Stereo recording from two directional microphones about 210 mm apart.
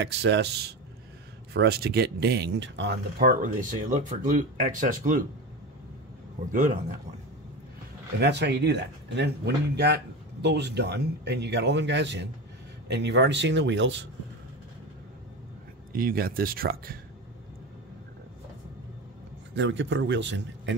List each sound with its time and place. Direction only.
0.0 s speech: 55° right (ahead or behind)
1.5 s speech: 50° right (ahead or behind)
8.2 s speech: 55° right (ahead or behind)
15.9 s speech: 45° right (ahead or behind)
19.5 s speech: 60° right (ahead or behind)